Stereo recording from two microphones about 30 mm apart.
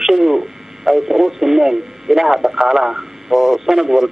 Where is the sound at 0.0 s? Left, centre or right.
Centre.